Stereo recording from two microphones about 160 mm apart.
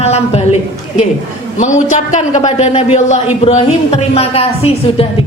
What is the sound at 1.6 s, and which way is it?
A man's voice, 50° left (ahead or behind).